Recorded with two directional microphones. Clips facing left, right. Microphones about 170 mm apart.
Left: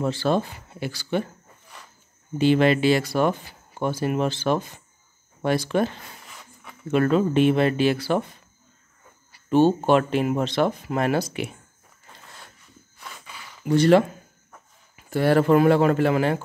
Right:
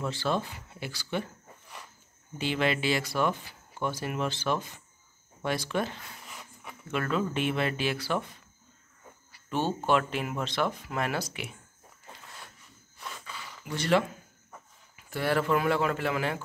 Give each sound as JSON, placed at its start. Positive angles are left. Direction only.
{"t": 0.0, "sound": "speech", "side_deg": 40}
{"t": 2.3, "sound": "speech", "side_deg": 40}
{"t": 6.2, "sound": "a sound", "side_deg": -5}
{"t": 6.9, "sound": "speech", "side_deg": 35}
{"t": 9.5, "sound": "speech", "side_deg": 25}
{"t": 13.2, "sound": "a sound", "side_deg": 10}
{"t": 13.7, "sound": "speech", "side_deg": 40}